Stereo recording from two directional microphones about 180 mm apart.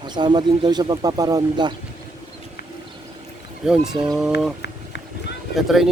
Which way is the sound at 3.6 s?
5° right (ahead or behind).